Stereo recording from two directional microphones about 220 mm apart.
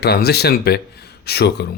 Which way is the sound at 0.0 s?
45° left (ahead or behind).